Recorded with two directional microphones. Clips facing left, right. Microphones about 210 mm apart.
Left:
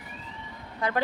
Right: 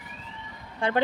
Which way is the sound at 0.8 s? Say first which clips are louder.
Right 3 dB; 25° right (ahead or behind).